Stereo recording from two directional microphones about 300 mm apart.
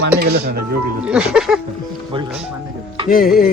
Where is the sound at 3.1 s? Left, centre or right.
Left.